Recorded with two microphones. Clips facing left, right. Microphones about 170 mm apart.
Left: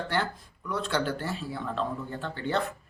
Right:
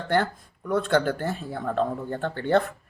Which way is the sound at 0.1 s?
50° right (ahead or behind).